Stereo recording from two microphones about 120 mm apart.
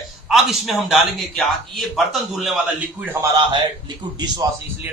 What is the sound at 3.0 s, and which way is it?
Speech, 20° right (ahead or behind).